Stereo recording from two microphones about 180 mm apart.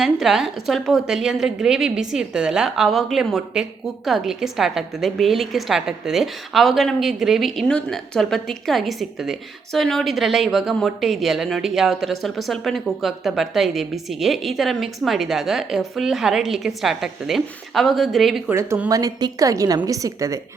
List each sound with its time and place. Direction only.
0.0 s a woman's voice: centre (ahead or behind)
18.5 s a woman's voice: 15° right (ahead or behind)